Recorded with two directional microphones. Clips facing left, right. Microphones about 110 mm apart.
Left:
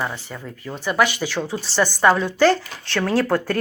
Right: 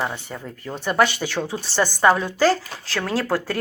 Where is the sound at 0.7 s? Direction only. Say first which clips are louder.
Even; 5° left (ahead or behind).